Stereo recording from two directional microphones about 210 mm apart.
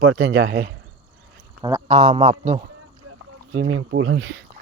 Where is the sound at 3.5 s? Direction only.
65° right (ahead or behind).